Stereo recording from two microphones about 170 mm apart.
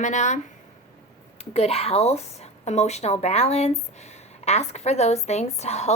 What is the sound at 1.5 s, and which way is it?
A woman's voice, 35° left (ahead or behind).